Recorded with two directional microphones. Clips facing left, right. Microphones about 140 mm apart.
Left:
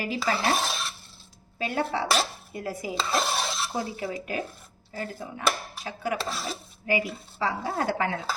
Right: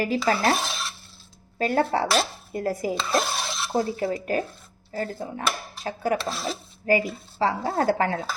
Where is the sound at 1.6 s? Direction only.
45° right (ahead or behind).